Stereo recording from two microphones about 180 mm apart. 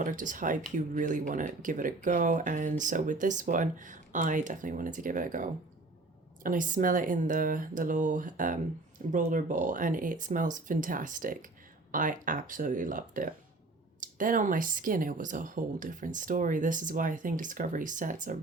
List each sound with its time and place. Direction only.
0.0 s speech: 45° right (ahead or behind)